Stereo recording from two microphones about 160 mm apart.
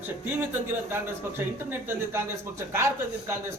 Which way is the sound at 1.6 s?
15° right (ahead or behind).